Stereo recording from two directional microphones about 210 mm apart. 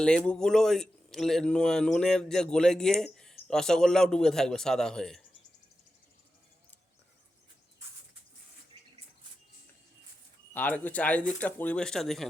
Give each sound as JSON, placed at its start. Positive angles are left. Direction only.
{"t": 0.0, "sound": "a man's voice", "side_deg": 5}
{"t": 10.5, "sound": "speech", "side_deg": 10}